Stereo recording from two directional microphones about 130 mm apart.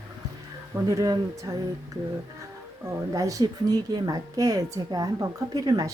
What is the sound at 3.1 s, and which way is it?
A woman's voice, 25° right (ahead or behind).